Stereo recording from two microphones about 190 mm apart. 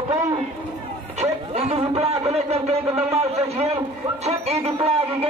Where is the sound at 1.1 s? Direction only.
35° right (ahead or behind).